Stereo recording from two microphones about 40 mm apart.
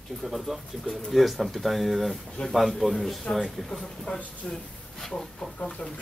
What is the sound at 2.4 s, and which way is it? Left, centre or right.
Speech, left.